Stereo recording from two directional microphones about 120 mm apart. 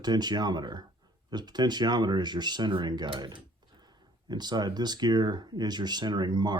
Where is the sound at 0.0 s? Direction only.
35° right (ahead or behind).